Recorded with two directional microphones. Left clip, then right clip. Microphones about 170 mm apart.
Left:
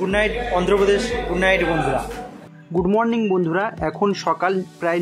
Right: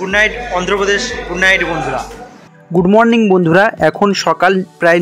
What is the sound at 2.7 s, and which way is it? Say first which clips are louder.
Speech: right 9 dB; 25° right (ahead or behind).